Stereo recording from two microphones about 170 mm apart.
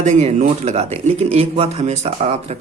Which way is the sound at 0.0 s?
45° right (ahead or behind).